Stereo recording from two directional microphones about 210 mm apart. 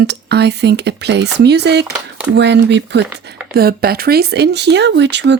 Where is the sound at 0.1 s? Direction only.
50° right (ahead or behind).